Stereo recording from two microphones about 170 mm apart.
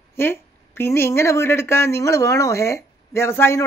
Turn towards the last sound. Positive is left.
turn(degrees=15)  # may be behind; listen again after turning